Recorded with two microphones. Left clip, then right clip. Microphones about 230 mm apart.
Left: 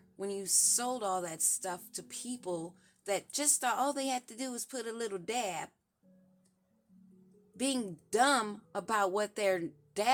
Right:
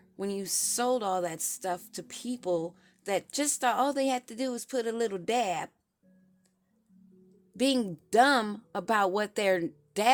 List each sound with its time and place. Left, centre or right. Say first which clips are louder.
0.2 s speech: right 1 dB; right
7.5 s speech: right 7 dB; right